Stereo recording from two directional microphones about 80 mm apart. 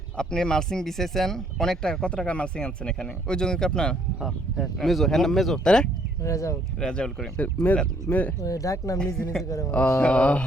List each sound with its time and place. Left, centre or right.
0.2 s speech: centre
4.2 s speech: centre
6.2 s speech: left
6.7 s speech: centre
7.4 s speech: left
8.4 s speech: left
10.0 s speech: centre